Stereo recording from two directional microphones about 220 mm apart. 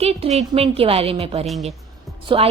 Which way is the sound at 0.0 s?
30° right (ahead or behind).